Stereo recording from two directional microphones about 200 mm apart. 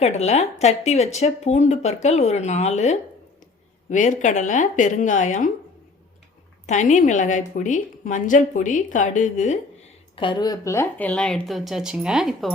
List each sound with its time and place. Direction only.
0.0 s speech: 35° left (ahead or behind)
6.7 s speech: 35° left (ahead or behind)
10.2 s speech: 25° left (ahead or behind); by 12.5 s centre (ahead or behind)